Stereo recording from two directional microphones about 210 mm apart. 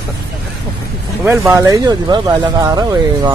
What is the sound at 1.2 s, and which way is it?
Speech, 10° right (ahead or behind).